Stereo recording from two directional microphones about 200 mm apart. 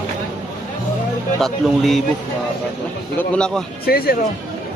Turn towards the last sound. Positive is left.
turn(degrees=50)  # may be behind; listen again after turning